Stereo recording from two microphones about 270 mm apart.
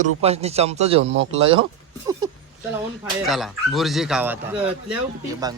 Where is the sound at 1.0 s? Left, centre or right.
Right.